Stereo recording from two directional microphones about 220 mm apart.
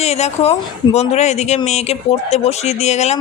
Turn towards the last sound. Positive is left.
turn(degrees=30)  # may be behind; listen again after turning